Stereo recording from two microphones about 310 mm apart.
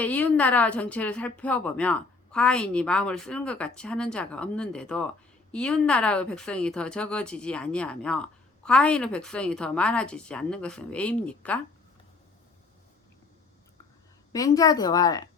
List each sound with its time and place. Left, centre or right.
0.0 s speech: centre
14.3 s speech: centre